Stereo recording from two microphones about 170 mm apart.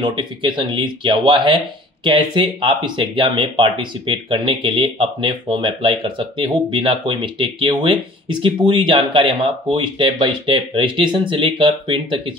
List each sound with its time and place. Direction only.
0.0 s speech: 25° right (ahead or behind)